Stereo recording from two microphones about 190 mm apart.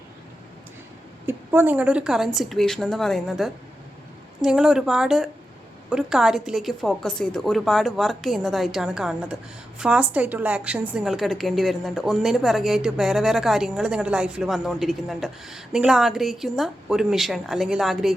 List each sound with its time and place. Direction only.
1.3 s a woman's voice: 10° right (ahead or behind)